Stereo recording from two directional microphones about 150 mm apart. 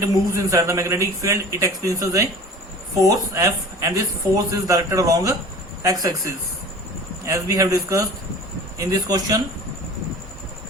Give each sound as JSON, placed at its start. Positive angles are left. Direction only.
{"t": 0.0, "sound": "a man's voice", "side_deg": -20}